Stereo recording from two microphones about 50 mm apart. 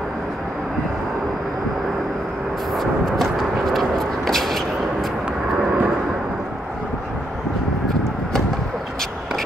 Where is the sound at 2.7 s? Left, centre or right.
Centre.